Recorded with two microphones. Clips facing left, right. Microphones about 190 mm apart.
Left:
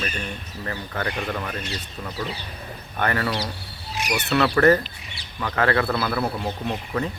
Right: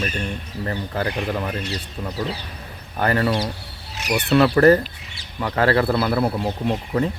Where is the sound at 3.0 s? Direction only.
25° right (ahead or behind).